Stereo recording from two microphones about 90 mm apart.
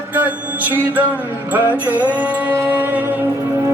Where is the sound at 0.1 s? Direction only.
20° right (ahead or behind).